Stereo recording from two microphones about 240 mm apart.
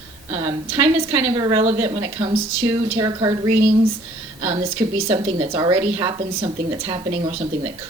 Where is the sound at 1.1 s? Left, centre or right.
Centre.